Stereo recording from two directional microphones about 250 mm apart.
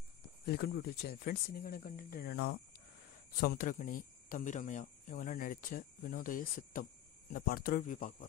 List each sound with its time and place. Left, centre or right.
0.5 s speech: left